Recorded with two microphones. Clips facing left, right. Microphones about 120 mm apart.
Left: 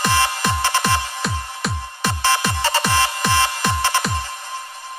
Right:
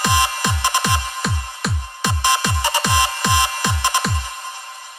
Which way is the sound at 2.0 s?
15° right (ahead or behind).